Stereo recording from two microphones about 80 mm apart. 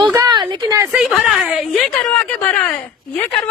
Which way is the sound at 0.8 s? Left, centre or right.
Centre.